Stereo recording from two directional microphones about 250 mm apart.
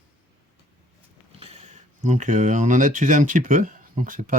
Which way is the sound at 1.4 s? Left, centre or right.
Right.